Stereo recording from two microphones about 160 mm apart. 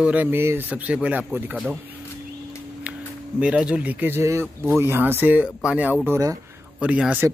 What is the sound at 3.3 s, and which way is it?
A man's voice, 10° right (ahead or behind).